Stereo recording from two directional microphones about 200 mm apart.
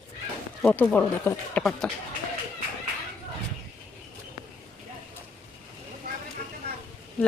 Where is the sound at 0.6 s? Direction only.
5° left (ahead or behind).